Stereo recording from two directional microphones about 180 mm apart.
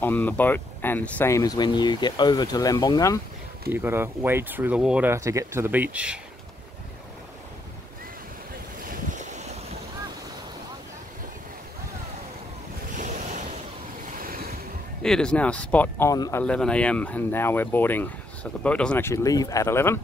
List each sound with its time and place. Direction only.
0.0 s speech: 10° left (ahead or behind)
3.7 s speech: 10° right (ahead or behind)
8.8 s boat: 50° right (ahead or behind)
12.9 s waves: 45° right (ahead or behind)
15.0 s speech: 5° left (ahead or behind)